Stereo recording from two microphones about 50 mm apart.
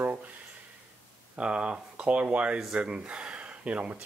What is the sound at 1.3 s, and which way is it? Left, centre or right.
Speech, right.